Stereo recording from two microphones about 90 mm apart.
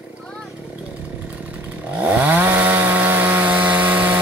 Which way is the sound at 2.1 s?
20° right (ahead or behind).